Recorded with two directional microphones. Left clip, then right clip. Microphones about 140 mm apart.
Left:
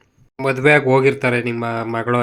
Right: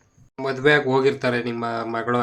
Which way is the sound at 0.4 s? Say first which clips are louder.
Left 5 dB; 35° left (ahead or behind).